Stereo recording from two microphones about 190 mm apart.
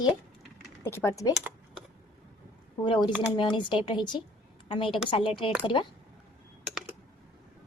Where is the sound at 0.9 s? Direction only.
15° left (ahead or behind).